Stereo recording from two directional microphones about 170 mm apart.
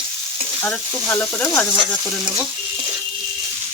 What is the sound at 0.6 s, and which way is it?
Frying, 10° left (ahead or behind).